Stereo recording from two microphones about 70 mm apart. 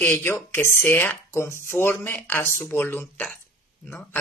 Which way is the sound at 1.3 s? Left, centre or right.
Left.